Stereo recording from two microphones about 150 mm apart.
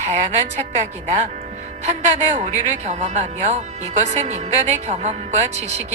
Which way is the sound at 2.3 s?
55° right (ahead or behind).